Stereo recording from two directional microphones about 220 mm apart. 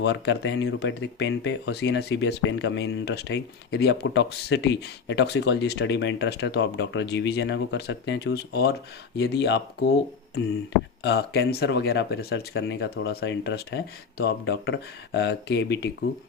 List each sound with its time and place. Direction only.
0.0 s speech: 50° left (ahead or behind)
11.0 s speech: 50° left (ahead or behind)